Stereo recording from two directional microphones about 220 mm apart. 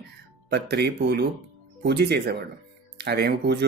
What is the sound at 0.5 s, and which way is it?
Speech, 50° right (ahead or behind).